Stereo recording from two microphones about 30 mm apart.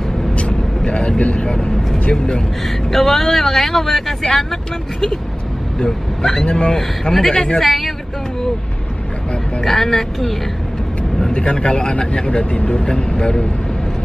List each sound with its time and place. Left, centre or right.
0.3 s vehicle: left
1.2 s speech: left
2.6 s speech: centre
5.9 s speech: centre
6.7 s speech: centre
9.6 s speech: centre
11.3 s speech: left
12.3 s speech: left